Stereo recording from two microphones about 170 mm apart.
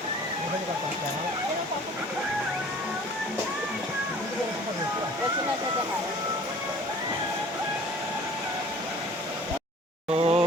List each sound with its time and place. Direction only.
10.2 s speech: 35° right (ahead or behind)